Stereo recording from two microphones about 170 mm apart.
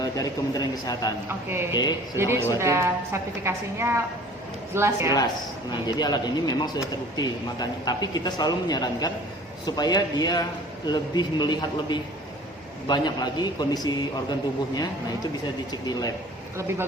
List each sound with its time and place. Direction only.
0.0 s a man's voice: 20° left (ahead or behind)
1.3 s a woman's voice: 15° right (ahead or behind)
1.7 s a man's voice: 25° left (ahead or behind)
2.1 s a woman's voice: 15° right (ahead or behind)
6.0 s a man's voice: 25° left (ahead or behind)
15.7 s a man's voice: 25° left (ahead or behind)
16.6 s a woman's voice: 15° right (ahead or behind)